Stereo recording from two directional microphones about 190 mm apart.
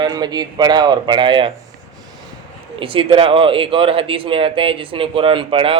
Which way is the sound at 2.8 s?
30° right (ahead or behind).